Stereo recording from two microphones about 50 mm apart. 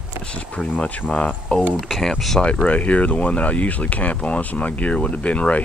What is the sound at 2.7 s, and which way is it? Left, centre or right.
Speech, left.